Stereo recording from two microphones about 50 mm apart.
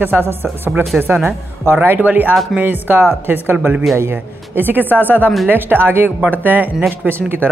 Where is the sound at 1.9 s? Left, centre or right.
Right.